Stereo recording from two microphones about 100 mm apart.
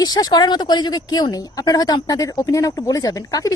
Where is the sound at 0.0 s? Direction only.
40° left (ahead or behind).